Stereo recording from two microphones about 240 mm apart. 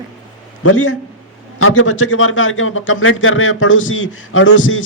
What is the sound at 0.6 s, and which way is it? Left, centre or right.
A man's voice, left.